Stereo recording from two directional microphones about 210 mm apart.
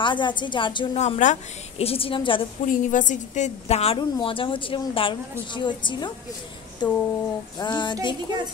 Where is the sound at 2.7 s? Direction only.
40° left (ahead or behind); by 6.1 s 20° left (ahead or behind).